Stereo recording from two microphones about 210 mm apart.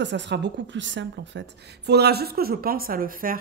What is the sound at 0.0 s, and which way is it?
A woman's voice, 55° right (ahead or behind).